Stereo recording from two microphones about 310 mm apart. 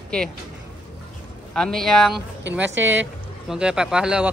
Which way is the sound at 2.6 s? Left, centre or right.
Right.